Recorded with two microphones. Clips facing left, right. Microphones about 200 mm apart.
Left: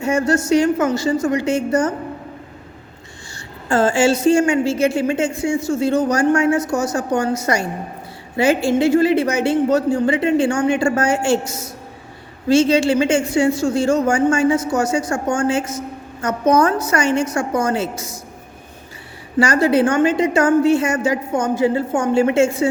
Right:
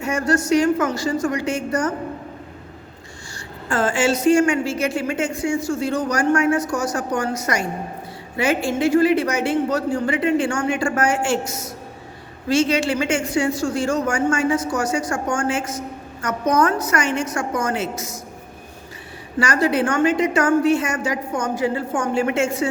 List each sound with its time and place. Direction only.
0.0 s a woman's voice: 25° left (ahead or behind)
3.3 s a woman's voice: 25° left (ahead or behind)
19.4 s a woman's voice: 25° left (ahead or behind)